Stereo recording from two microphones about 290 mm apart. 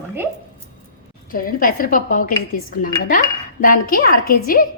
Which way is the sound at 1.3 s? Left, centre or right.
Left.